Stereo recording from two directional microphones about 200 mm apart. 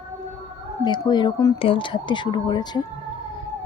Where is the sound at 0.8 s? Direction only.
20° left (ahead or behind).